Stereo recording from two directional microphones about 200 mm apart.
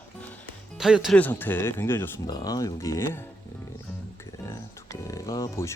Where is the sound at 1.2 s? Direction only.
10° left (ahead or behind).